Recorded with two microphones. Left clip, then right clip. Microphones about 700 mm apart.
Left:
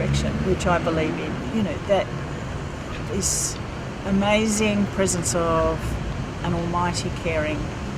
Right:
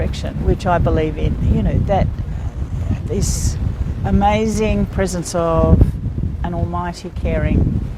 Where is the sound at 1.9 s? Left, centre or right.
Right.